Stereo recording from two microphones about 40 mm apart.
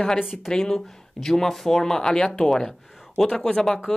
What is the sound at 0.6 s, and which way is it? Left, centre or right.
Speech, centre.